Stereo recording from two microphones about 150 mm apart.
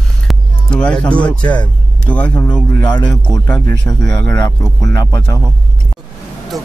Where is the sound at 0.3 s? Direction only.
5° left (ahead or behind); by 5.4 s 20° left (ahead or behind).